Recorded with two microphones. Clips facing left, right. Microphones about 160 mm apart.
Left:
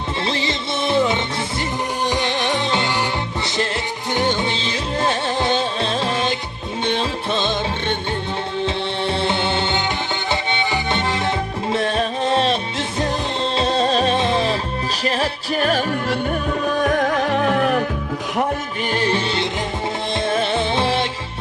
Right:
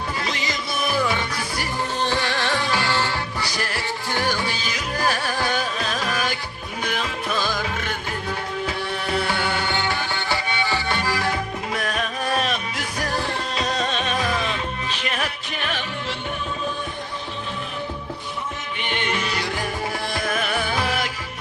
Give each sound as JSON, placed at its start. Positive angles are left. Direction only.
{"t": 0.3, "sound": "music", "side_deg": 30}
{"t": 16.7, "sound": "music", "side_deg": 85}
{"t": 18.9, "sound": "music", "side_deg": 35}